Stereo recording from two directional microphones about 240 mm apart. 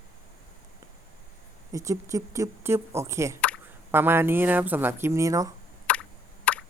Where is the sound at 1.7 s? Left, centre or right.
Centre.